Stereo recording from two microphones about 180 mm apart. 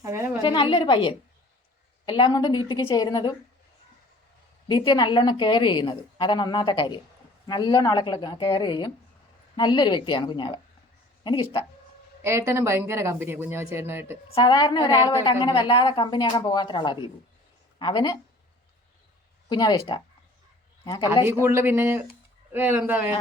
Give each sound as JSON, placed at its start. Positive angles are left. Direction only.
{"t": 0.0, "sound": "a sound", "side_deg": -15}
{"t": 0.4, "sound": "a woman's voice", "side_deg": 30}
{"t": 4.7, "sound": "a woman's voice", "side_deg": 25}
{"t": 12.2, "sound": "speech", "side_deg": -15}
{"t": 14.3, "sound": "a woman's voice", "side_deg": 30}
{"t": 19.5, "sound": "a woman's voice", "side_deg": 25}
{"t": 21.4, "sound": "speech", "side_deg": -15}